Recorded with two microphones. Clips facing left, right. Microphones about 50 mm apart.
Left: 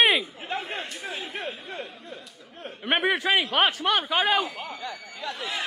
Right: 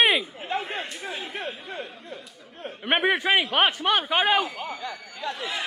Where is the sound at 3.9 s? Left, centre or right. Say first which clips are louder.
Right 1 dB; right.